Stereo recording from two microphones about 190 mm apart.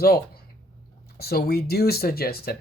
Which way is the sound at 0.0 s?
55° left (ahead or behind).